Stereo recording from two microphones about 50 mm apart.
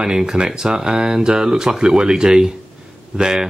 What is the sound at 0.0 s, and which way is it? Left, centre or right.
Speech, centre.